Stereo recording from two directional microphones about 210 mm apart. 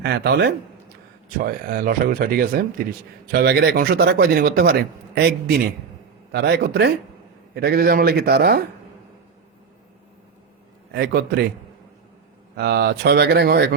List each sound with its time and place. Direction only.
0.0 s speech: 50° right (ahead or behind)
10.9 s speech: 50° right (ahead or behind)
12.5 s speech: 50° right (ahead or behind)